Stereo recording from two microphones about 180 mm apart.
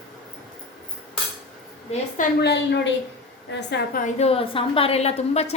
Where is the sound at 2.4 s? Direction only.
70° left (ahead or behind).